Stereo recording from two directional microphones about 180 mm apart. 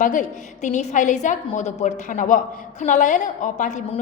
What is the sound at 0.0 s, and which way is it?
A woman's voice, 45° left (ahead or behind).